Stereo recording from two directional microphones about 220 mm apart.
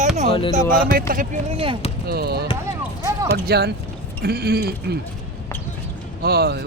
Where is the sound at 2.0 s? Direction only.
45° right (ahead or behind).